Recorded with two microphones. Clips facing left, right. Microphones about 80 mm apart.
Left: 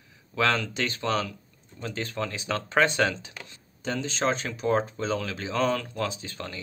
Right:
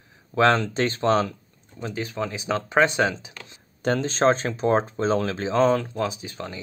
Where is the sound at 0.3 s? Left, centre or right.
Right.